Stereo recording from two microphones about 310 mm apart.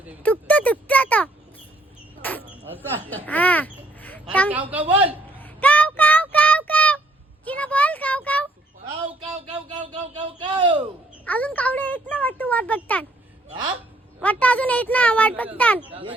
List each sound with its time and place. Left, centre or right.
0.2 s a sound: centre
3.2 s a sound: centre
4.5 s a child's voice: centre
5.4 s child singing: centre
7.4 s a sound: centre
10.4 s a man's voice: centre
11.4 s a child's voice: centre
14.2 s a child's voice: centre
15.8 s a man's voice: centre